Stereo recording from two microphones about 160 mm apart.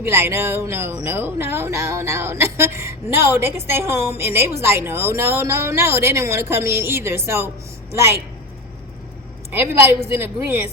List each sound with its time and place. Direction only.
0.0 s speech: 15° right (ahead or behind)
9.5 s speech: 15° right (ahead or behind)